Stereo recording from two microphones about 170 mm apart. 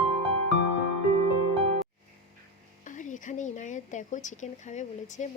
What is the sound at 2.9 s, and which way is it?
Speech, 45° left (ahead or behind).